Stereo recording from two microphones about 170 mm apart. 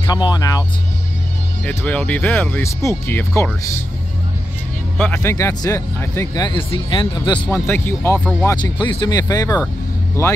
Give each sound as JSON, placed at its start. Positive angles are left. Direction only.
{"t": 0.0, "sound": "speech", "side_deg": 25}
{"t": 1.6, "sound": "speech", "side_deg": 10}
{"t": 4.9, "sound": "speech", "side_deg": 10}
{"t": 7.5, "sound": "speech", "side_deg": 15}